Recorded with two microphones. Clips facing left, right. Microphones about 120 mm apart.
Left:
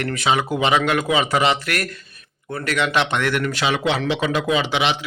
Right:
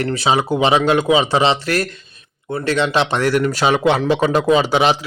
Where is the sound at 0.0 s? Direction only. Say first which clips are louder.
Right 3 dB; 30° right (ahead or behind).